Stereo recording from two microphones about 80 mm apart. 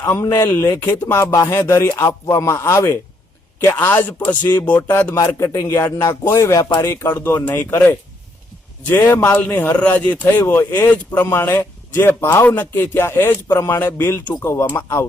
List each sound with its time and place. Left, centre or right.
0.0 s speech: left
6.6 s speech: left
6.8 s speech: left; by 10.4 s centre
10.4 s speech: left